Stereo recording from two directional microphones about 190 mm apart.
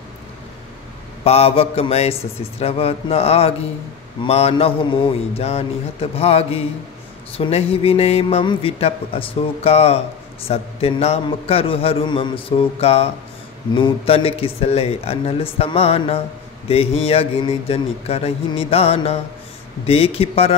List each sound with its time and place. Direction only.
1.2 s a man's voice: 30° left (ahead or behind)